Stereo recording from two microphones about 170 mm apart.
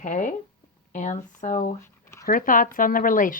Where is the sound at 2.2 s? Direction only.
55° left (ahead or behind).